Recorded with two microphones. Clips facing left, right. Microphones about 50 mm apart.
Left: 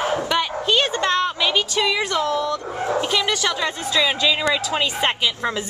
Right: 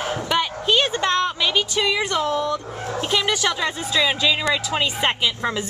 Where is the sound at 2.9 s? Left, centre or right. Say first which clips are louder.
Right 1 dB; centre.